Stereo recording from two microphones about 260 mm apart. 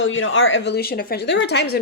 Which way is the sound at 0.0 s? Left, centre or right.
Left.